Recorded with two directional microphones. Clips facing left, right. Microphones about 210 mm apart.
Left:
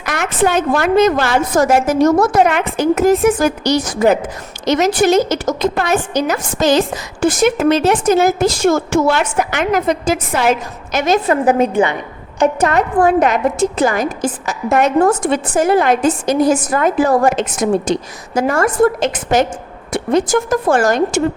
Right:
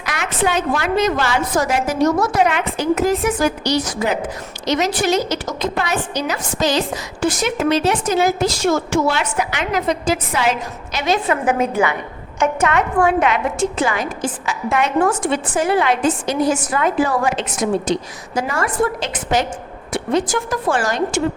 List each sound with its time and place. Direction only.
0.0 s a woman's voice: 50° left (ahead or behind)